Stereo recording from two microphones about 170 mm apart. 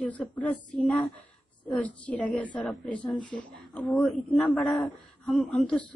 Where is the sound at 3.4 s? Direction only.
5° left (ahead or behind).